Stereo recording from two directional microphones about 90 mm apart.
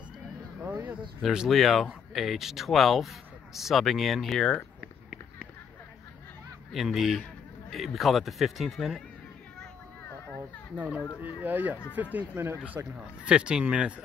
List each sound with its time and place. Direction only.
0.7 s a sound: 20° right (ahead or behind)
1.2 s speech: 5° right (ahead or behind)
6.7 s speech: centre (ahead or behind)
11.2 s speech: 20° right (ahead or behind)